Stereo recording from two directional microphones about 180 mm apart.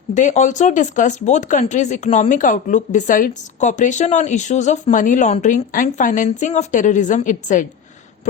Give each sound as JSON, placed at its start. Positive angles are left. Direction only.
{"t": 0.1, "sound": "speech", "side_deg": 45}